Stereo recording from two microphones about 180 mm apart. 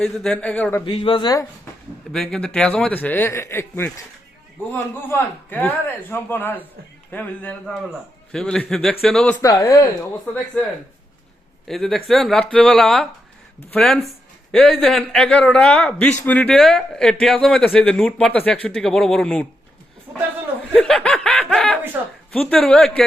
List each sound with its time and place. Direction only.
0.0 s a man's voice: 5° left (ahead or behind)
0.9 s speech: 30° left (ahead or behind)
2.1 s a man's voice: 5° left (ahead or behind)
9.4 s speech: 20° left (ahead or behind)
11.7 s a man's voice: centre (ahead or behind)
20.1 s a man's voice: 10° right (ahead or behind)
20.6 s snicker: 5° left (ahead or behind)
22.3 s a man's voice: 5° left (ahead or behind)